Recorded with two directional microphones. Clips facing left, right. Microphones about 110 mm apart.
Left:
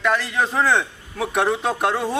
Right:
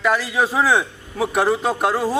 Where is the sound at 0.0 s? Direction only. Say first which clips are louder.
Right 2 dB; 5° right (ahead or behind).